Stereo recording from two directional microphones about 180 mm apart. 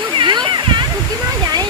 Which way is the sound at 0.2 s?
25° right (ahead or behind).